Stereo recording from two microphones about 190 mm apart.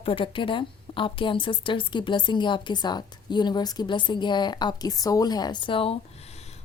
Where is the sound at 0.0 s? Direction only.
25° left (ahead or behind).